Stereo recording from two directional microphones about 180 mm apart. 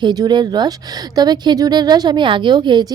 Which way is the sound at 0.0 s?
20° right (ahead or behind).